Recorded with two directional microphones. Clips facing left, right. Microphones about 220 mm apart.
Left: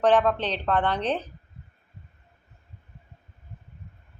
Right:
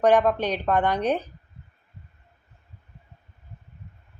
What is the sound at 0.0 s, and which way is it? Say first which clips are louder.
A woman's voice: right 2 dB; 10° right (ahead or behind).